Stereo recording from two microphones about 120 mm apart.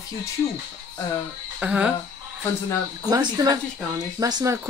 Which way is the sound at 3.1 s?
35° right (ahead or behind).